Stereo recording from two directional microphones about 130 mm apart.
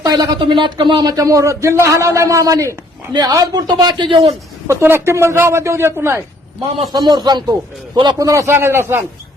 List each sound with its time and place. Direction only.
0.0 s a man's voice: 30° right (ahead or behind)
4.7 s speech: 20° right (ahead or behind)
6.8 s a man's voice: 35° right (ahead or behind)
8.2 s speech: 25° right (ahead or behind)